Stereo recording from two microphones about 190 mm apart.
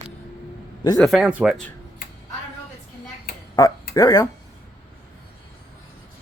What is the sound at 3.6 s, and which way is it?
Speech, 20° left (ahead or behind).